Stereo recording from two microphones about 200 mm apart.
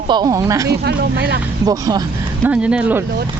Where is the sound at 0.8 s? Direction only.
55° right (ahead or behind).